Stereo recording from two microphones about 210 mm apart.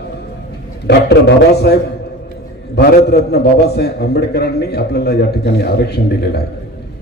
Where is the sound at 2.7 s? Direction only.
50° left (ahead or behind).